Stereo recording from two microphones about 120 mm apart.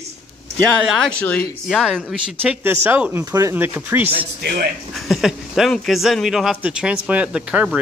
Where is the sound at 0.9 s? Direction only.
10° left (ahead or behind).